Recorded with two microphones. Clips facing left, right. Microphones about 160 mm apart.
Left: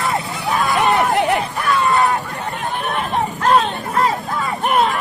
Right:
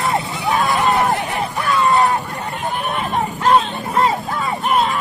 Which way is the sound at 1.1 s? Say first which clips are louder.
Left 5 dB; 80° left.